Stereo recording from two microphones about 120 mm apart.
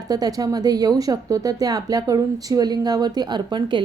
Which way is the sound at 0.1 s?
30° right (ahead or behind).